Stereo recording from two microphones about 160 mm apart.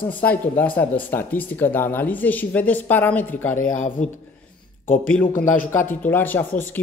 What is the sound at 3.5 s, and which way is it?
Speech, 55° left (ahead or behind).